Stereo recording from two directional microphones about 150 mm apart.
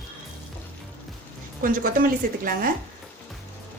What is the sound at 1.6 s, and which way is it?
A woman's voice, 65° right (ahead or behind).